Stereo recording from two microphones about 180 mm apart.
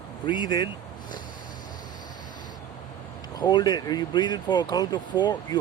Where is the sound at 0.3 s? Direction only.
25° left (ahead or behind).